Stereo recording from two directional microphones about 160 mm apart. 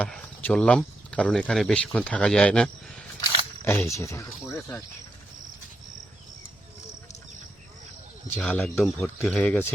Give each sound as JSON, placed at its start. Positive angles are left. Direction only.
{"t": 0.0, "sound": "speech", "side_deg": 5}
{"t": 8.4, "sound": "speech", "side_deg": 5}